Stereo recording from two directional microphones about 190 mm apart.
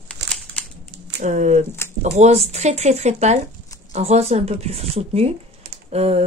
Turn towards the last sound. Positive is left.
turn(degrees=-35)  # may be behind; listen again after turning